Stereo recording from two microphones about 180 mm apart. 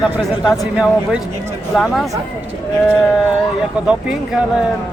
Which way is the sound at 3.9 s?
5° right (ahead or behind).